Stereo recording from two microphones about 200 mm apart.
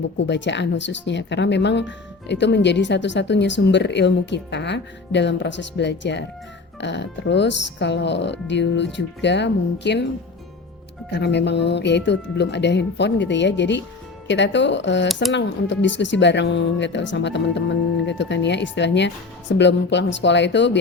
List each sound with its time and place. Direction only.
0.2 s speech: 60° left (ahead or behind)
11.1 s speech: 60° left (ahead or behind)
15.0 s speech: centre (ahead or behind)
15.3 s speech: 65° left (ahead or behind)